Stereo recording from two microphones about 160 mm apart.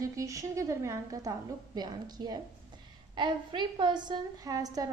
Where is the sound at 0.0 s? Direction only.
20° right (ahead or behind).